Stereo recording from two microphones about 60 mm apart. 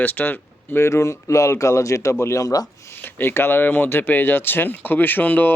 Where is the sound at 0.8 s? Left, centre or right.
Left.